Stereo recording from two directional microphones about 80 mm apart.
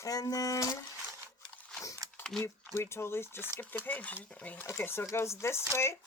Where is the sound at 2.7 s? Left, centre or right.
Left; by 4.7 s centre.